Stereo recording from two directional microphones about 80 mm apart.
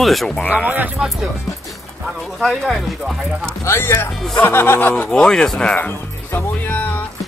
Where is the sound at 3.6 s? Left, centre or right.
Left.